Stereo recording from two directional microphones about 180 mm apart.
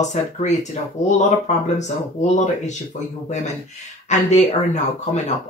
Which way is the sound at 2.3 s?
40° left (ahead or behind).